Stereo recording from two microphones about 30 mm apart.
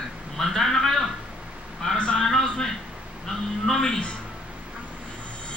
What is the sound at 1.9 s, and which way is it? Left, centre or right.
Speech, left.